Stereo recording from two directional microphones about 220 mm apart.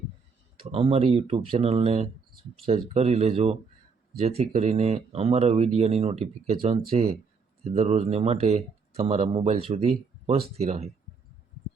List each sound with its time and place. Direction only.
0.6 s speech: 25° right (ahead or behind)